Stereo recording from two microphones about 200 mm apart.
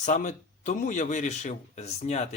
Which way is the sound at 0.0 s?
40° left (ahead or behind).